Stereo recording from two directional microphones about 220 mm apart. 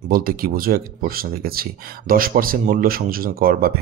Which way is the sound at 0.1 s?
40° right (ahead or behind).